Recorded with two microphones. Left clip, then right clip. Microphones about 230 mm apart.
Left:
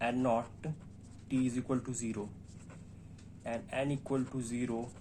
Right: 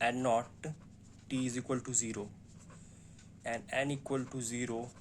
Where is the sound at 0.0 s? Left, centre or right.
Right.